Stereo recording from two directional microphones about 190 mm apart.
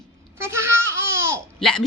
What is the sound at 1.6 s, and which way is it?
Speech, centre (ahead or behind).